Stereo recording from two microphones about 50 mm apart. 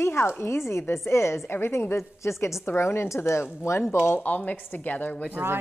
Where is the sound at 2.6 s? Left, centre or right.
Left.